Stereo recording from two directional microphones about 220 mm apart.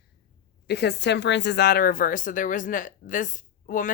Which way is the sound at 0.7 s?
50° left (ahead or behind).